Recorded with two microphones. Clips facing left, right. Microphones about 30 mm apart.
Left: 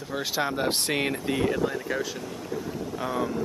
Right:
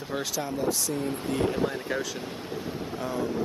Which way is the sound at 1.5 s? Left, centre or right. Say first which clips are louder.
Left 1 dB; centre.